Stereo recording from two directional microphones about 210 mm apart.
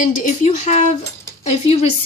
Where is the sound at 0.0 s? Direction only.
35° left (ahead or behind).